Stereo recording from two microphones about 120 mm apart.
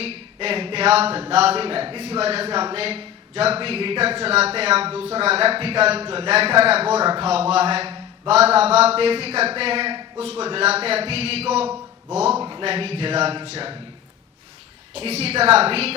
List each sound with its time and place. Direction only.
0.0 s a sound: 55° right (ahead or behind)
1.3 s speech: 60° right (ahead or behind)
9.9 s a sound: 40° right (ahead or behind)
10.2 s speech: 55° right (ahead or behind)
12.4 s speech: 40° right (ahead or behind)
12.6 s speech: 55° right (ahead or behind)
14.9 s speech: 60° right (ahead or behind)